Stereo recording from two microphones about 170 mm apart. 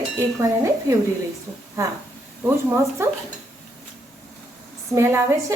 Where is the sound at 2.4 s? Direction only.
15° right (ahead or behind).